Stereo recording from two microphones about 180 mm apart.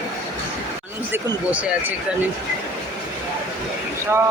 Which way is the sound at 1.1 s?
10° right (ahead or behind).